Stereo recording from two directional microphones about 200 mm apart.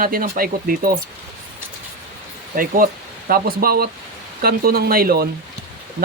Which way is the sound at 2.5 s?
45° right (ahead or behind).